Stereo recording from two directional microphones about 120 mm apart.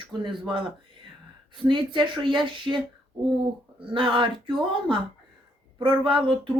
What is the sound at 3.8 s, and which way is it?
Speech, 45° right (ahead or behind).